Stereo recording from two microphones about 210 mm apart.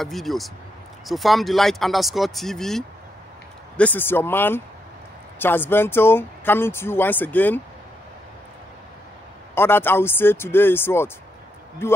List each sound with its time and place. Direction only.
0.0 s speech: centre (ahead or behind)
9.6 s speech: 10° left (ahead or behind)